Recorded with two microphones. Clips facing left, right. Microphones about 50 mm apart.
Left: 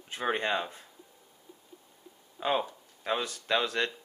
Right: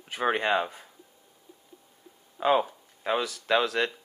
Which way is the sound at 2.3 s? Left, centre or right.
Right.